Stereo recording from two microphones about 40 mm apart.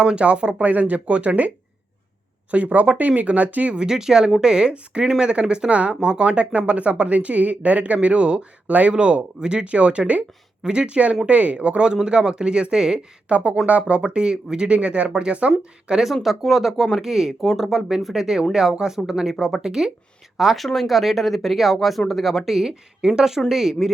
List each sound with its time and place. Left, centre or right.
0.0 s speech: right
0.6 s speech: right
3.8 s speech: centre; by 10.2 s right
10.6 s speech: right
13.2 s speech: right
16.2 s speech: centre
17.4 s speech: centre
17.7 s speech: centre